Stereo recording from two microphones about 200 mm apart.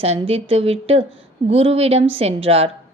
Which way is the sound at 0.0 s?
30° right (ahead or behind).